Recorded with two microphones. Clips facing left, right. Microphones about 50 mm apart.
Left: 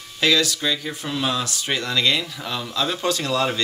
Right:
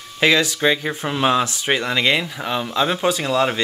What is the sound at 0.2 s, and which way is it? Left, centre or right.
Speech, right.